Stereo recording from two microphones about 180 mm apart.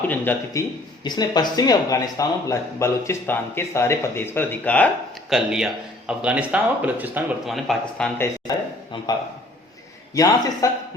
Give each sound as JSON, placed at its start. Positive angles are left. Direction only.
{"t": 0.1, "sound": "speech", "side_deg": 10}
{"t": 1.0, "sound": "speech", "side_deg": 25}
{"t": 5.3, "sound": "a man's voice", "side_deg": -5}
{"t": 10.2, "sound": "a man's voice", "side_deg": 20}